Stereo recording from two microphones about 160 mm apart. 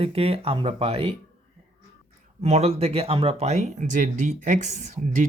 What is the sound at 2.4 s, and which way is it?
Speech, 40° right (ahead or behind).